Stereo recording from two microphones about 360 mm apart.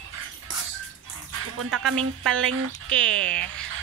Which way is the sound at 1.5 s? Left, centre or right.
Right.